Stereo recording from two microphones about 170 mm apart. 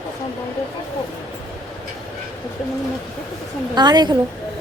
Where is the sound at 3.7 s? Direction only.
25° right (ahead or behind).